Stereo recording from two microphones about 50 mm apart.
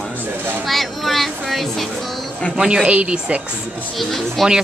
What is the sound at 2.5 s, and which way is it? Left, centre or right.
Speech, centre.